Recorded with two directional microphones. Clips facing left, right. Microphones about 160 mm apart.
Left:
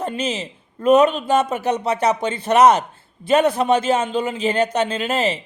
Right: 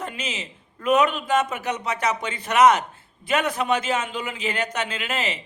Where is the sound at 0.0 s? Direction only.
30° left (ahead or behind).